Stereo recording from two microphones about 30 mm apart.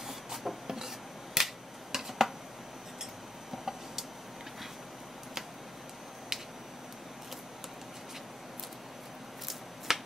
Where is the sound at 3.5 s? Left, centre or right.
Centre.